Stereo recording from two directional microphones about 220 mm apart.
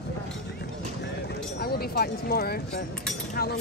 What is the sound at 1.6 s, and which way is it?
Speech, 45° left (ahead or behind).